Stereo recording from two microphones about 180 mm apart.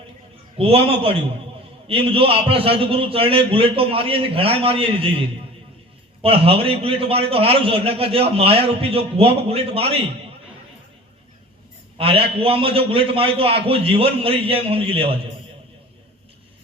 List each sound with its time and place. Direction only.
0.5 s a man's voice: 30° right (ahead or behind)
6.2 s a man's voice: 30° right (ahead or behind)
11.9 s a man's voice: 30° right (ahead or behind)